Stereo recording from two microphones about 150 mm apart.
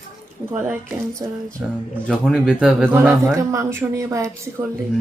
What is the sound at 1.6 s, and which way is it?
Speech, 5° right (ahead or behind).